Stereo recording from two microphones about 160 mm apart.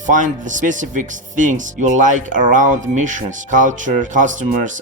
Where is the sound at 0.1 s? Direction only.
50° right (ahead or behind).